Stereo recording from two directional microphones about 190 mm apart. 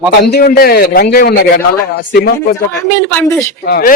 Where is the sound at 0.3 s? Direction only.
55° left (ahead or behind).